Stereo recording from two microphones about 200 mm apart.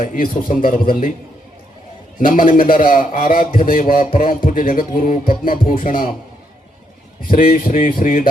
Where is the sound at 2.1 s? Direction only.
45° left (ahead or behind).